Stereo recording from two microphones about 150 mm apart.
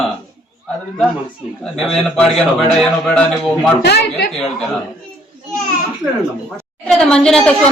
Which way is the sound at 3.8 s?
90° left.